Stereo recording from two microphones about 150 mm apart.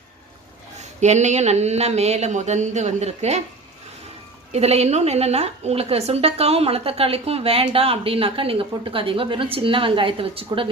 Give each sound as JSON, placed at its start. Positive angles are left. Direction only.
{"t": 0.8, "sound": "speech", "side_deg": -50}
{"t": 4.5, "sound": "a woman's voice", "side_deg": -45}